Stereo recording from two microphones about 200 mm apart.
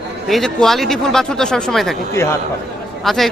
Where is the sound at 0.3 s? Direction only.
Centre (ahead or behind).